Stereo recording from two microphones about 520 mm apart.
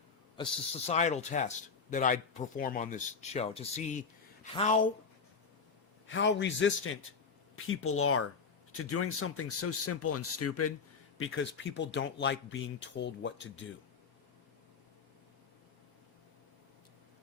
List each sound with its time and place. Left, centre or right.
0.3 s speech: centre
6.1 s speech: left